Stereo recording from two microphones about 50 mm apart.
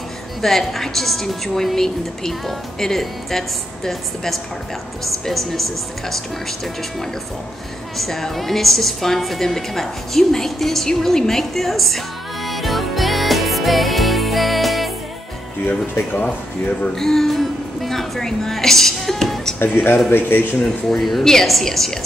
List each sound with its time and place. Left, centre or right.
0.4 s a woman's voice: centre
12.4 s music: centre
16.1 s speech: left
16.9 s a woman's voice: centre
19.6 s speech: left
21.0 s a woman's voice: centre